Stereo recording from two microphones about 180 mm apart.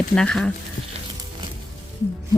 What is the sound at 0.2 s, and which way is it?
Speech, 5° left (ahead or behind).